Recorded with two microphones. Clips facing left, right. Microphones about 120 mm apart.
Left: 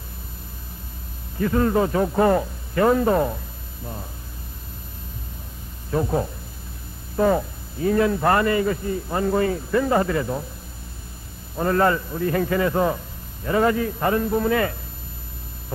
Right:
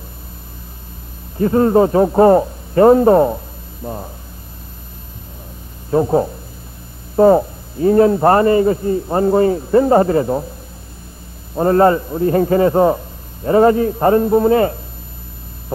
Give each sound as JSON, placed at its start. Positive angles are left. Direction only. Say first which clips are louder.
{"t": 1.4, "sound": "a man's voice", "louder": "right 8 dB", "side_deg": -30}
{"t": 5.9, "sound": "a man's voice", "louder": "right 8 dB", "side_deg": -30}
{"t": 11.5, "sound": "a man's voice", "louder": "right 8 dB", "side_deg": -35}